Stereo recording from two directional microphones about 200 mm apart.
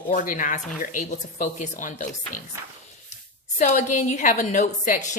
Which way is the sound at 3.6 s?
35° left (ahead or behind).